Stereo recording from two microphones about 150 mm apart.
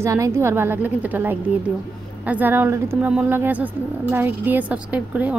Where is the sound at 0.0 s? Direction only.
20° right (ahead or behind).